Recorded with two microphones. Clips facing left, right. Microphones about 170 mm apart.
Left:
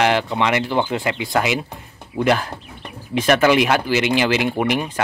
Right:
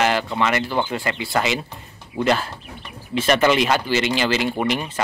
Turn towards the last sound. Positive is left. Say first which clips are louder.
# left 2 dB
turn(degrees=15)  # may be behind; listen again after turning